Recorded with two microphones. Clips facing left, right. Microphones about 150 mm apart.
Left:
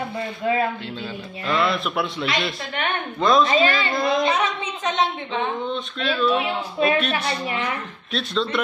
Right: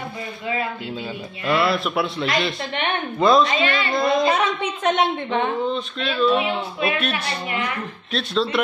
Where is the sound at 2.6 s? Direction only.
25° right (ahead or behind).